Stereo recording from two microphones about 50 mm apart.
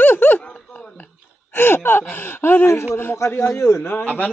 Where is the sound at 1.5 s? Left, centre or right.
Left.